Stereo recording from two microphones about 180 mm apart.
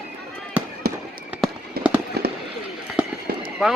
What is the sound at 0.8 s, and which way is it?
Fireworks, 55° right (ahead or behind).